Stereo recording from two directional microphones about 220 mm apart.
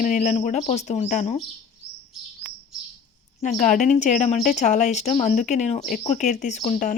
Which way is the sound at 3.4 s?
35° left (ahead or behind).